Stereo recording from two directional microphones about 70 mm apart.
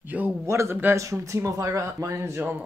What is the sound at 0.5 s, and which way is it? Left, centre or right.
Speech, right.